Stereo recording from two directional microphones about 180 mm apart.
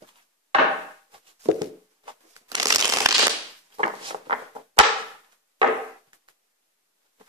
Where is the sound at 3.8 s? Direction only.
30° right (ahead or behind).